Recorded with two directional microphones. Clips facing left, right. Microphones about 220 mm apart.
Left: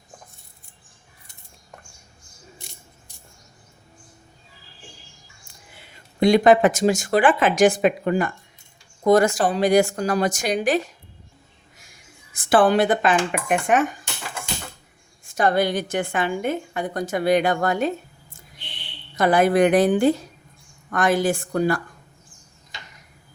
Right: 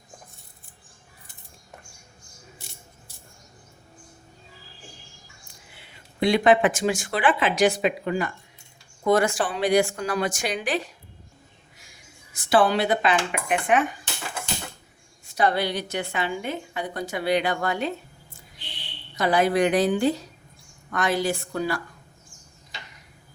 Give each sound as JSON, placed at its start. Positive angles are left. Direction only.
{"t": 5.7, "sound": "a woman's voice", "side_deg": 45}
{"t": 12.3, "sound": "a woman's voice", "side_deg": 50}
{"t": 15.2, "sound": "a woman's voice", "side_deg": 50}
{"t": 19.1, "sound": "a woman's voice", "side_deg": 50}